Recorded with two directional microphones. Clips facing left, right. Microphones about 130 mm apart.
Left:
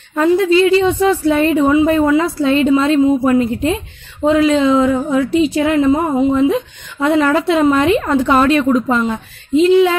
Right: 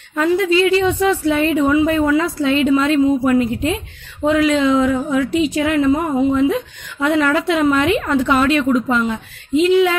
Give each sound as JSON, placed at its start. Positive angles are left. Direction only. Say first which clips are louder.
{"t": 0.1, "sound": "a woman's voice", "louder": "left 3 dB", "side_deg": 35}